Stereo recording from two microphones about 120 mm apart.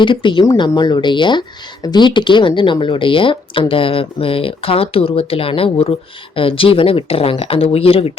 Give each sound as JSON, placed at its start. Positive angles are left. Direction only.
{"t": 0.0, "sound": "speech", "side_deg": 45}